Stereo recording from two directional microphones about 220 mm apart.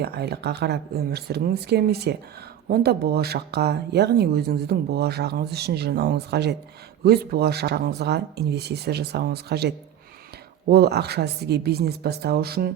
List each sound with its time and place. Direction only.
0.0 s speech: 45° right (ahead or behind)